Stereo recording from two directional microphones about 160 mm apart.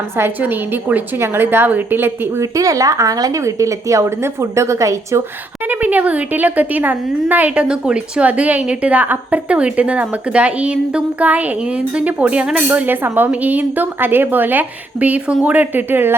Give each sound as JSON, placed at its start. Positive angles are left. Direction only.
{"t": 0.2, "sound": "speech", "side_deg": -10}